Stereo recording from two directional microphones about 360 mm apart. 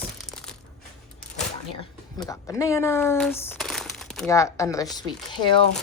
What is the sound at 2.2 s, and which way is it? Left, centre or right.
Speech, centre.